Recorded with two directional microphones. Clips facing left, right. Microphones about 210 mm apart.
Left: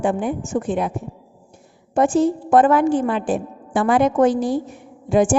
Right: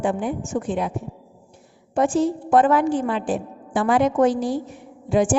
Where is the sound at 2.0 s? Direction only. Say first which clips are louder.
Left 3 dB; 50° left (ahead or behind).